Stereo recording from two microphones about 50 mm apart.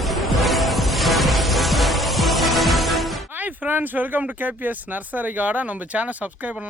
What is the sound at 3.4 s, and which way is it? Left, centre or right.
Speech, right.